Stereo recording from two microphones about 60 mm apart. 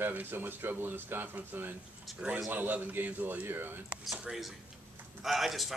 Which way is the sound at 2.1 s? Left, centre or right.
Centre.